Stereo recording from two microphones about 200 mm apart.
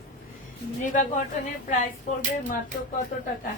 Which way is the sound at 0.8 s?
40° left (ahead or behind).